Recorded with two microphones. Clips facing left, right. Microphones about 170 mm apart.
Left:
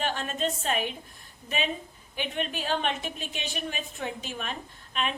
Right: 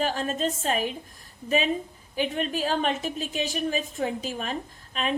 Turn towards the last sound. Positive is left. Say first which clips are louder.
# right 3 dB
turn(degrees=-35)  # may be behind; listen again after turning